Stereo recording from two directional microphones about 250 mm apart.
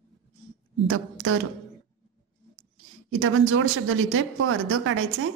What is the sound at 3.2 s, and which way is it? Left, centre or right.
Speech, right.